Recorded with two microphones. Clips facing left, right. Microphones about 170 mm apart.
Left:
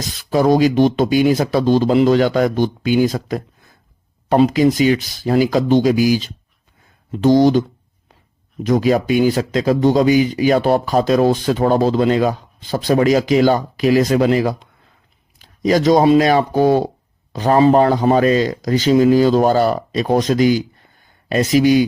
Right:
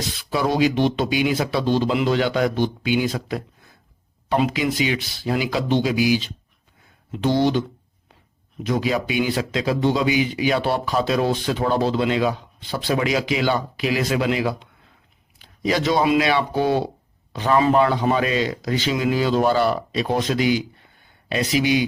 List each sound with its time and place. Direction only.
0.2 s a man's voice: 45° left (ahead or behind)
8.6 s a man's voice: 45° left (ahead or behind)